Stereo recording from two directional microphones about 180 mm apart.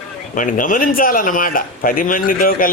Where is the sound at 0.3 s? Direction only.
45° left (ahead or behind).